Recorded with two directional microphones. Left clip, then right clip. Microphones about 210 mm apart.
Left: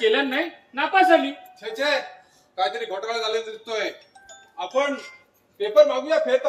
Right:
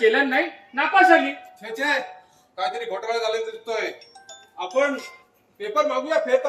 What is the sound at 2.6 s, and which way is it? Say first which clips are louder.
A man's voice: left 1 dB; 10° left (ahead or behind).